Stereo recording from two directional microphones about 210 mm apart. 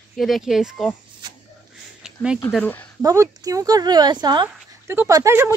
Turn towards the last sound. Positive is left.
turn(degrees=-15)  # may be behind; listen again after turning